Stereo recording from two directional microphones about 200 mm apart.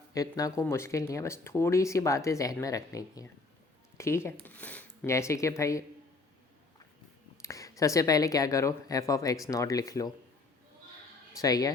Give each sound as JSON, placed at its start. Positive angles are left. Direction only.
{"t": 0.1, "sound": "speech", "side_deg": 15}
{"t": 7.4, "sound": "speech", "side_deg": 15}
{"t": 11.3, "sound": "speech", "side_deg": 20}